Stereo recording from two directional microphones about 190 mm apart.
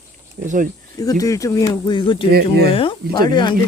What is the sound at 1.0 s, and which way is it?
Speech, 20° left (ahead or behind).